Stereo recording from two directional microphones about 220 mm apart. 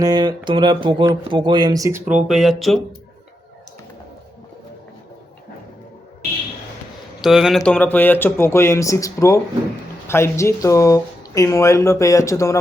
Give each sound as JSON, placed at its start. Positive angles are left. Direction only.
{"t": 0.0, "sound": "speech", "side_deg": -20}
{"t": 7.2, "sound": "speech", "side_deg": 0}